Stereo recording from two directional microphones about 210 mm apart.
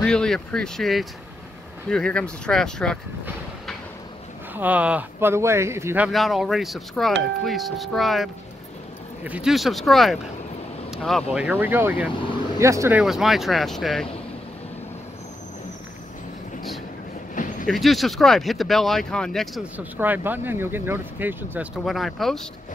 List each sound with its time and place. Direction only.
0.0 s speech: 5° left (ahead or behind)
4.6 s speech: 5° right (ahead or behind)
13.0 s speech: centre (ahead or behind)
17.6 s speech: centre (ahead or behind)